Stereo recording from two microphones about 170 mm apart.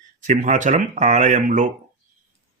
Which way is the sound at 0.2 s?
45° right (ahead or behind).